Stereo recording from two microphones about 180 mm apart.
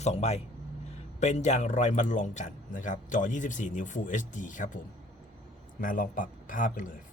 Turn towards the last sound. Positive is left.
turn(degrees=50)  # may be behind; listen again after turning